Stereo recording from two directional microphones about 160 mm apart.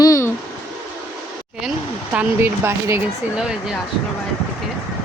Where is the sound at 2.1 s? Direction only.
15° right (ahead or behind).